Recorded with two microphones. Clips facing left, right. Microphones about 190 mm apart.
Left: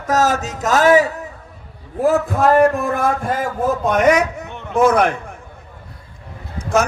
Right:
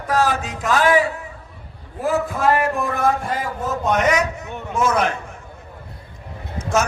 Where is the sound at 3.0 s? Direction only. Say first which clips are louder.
Left 1 dB; 50° left (ahead or behind).